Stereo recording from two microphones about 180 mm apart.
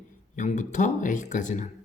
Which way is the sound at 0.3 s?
45° left (ahead or behind).